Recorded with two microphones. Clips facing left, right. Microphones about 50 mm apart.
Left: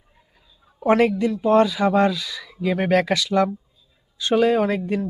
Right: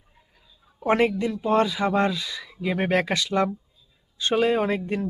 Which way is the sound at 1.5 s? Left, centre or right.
Centre.